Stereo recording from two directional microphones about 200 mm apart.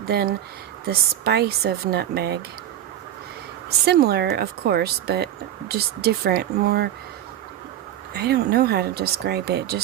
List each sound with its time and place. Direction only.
0.1 s speech: 50° right (ahead or behind)
3.8 s speech: 50° right (ahead or behind)
8.1 s speech: 55° right (ahead or behind)